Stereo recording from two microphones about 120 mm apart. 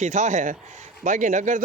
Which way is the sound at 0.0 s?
90° right.